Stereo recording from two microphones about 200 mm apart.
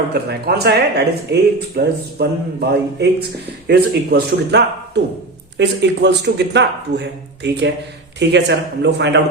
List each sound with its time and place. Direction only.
0.1 s speech: 55° right (ahead or behind)